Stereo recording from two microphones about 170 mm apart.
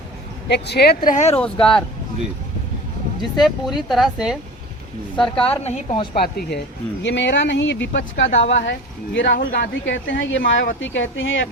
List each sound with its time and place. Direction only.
0.4 s speech: 80° left
1.1 s speech: 45° left (ahead or behind)
1.4 s speech: 5° left (ahead or behind)
3.3 s speech: centre (ahead or behind)
5.5 s a woman's voice: 35° left (ahead or behind)
6.1 s speech: 70° left (ahead or behind)
7.0 s speech: 90° left